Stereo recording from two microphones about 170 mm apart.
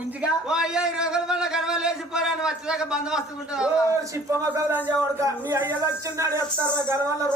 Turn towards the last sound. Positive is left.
turn(degrees=-15)  # may be behind; listen again after turning